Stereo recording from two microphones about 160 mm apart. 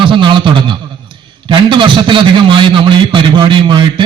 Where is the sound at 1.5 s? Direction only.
30° right (ahead or behind).